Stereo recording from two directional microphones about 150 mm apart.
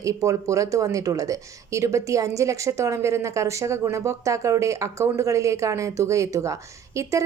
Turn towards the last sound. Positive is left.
turn(degrees=-20)  # may be behind; listen again after turning